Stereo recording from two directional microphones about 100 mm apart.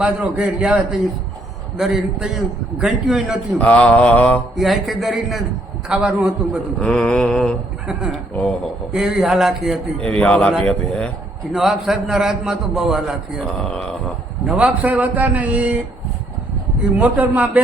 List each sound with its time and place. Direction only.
0.0 s a man's voice: 10° right (ahead or behind)
3.6 s mantra: 10° left (ahead or behind)
4.5 s a man's voice: centre (ahead or behind)
6.7 s mantra: 10° left (ahead or behind)
7.9 s a man's voice: 5° right (ahead or behind)
10.0 s mantra: 10° left (ahead or behind)
11.5 s a man's voice: centre (ahead or behind)
13.5 s mantra: 10° left (ahead or behind)
14.4 s a man's voice: 10° right (ahead or behind)
16.8 s a man's voice: 15° right (ahead or behind)